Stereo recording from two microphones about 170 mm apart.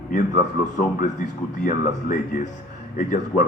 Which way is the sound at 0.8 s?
50° left (ahead or behind).